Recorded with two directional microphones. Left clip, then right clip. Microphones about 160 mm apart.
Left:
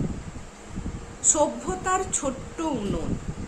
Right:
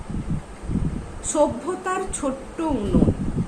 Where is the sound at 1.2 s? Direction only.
15° left (ahead or behind).